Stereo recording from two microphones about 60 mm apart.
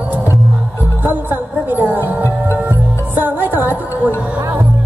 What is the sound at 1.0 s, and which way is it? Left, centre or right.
Music, right.